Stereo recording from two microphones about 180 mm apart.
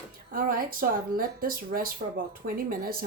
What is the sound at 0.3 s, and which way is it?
A woman's voice, 50° right (ahead or behind).